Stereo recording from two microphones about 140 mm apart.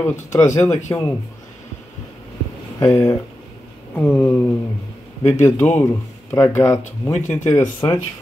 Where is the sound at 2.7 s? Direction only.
20° left (ahead or behind).